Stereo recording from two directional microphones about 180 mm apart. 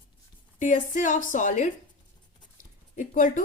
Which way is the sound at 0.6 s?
45° left (ahead or behind).